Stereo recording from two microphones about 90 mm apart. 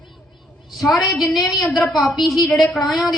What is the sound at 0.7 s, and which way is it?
A woman's voice, centre (ahead or behind).